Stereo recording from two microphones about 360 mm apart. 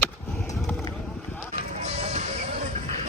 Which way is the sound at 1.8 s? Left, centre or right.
Centre.